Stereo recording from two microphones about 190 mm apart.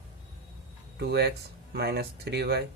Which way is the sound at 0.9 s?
60° right (ahead or behind).